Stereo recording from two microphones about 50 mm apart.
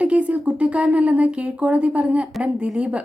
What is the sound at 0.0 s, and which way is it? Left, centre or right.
A woman's voice, right.